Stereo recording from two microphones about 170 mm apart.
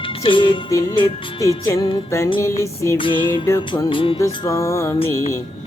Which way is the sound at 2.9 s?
30° left (ahead or behind).